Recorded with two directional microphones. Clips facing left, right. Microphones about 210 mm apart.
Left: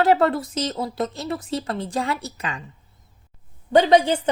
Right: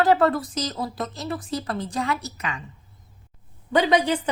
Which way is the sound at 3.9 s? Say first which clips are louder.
Left 3 dB; 25° left (ahead or behind).